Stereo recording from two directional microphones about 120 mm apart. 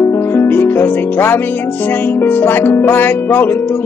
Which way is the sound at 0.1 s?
20° left (ahead or behind).